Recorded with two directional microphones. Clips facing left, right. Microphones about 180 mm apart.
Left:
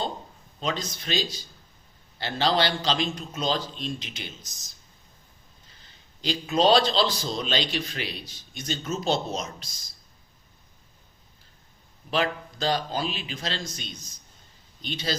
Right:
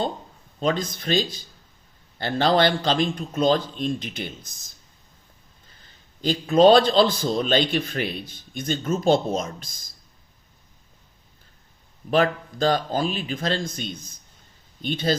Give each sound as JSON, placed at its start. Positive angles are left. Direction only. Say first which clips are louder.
{"t": 0.6, "sound": "a man's voice", "louder": "right 6 dB", "side_deg": -50}
{"t": 6.2, "sound": "a man's voice", "louder": "right 6 dB", "side_deg": -50}
{"t": 12.1, "sound": "a man's voice", "louder": "right 6 dB", "side_deg": -50}